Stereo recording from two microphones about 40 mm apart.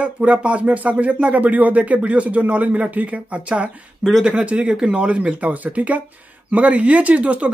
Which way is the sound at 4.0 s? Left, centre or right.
Centre.